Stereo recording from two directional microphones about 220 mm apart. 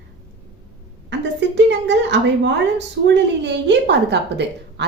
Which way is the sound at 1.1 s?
55° right (ahead or behind).